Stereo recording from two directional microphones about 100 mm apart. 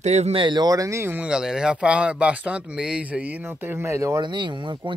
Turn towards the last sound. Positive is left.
turn(degrees=-55)  # may be behind; listen again after turning